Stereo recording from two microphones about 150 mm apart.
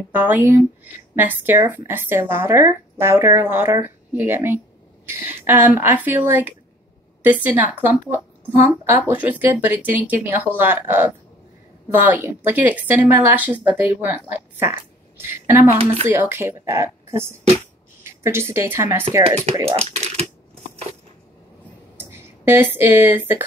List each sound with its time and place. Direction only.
0.1 s a woman's voice: 10° right (ahead or behind)
19.7 s speech: 45° right (ahead or behind)
22.1 s speech: 15° right (ahead or behind)